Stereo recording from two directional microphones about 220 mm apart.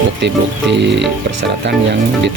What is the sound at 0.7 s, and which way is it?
Music, 55° right (ahead or behind).